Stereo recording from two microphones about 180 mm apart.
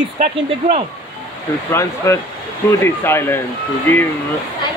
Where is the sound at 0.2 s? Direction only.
45° right (ahead or behind).